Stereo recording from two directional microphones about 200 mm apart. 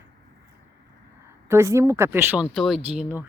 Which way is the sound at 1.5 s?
15° right (ahead or behind).